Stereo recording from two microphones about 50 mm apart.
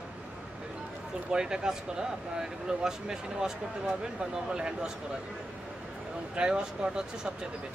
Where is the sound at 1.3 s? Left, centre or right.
Centre.